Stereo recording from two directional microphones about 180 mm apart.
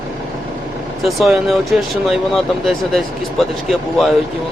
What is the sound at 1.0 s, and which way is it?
Speech, centre (ahead or behind).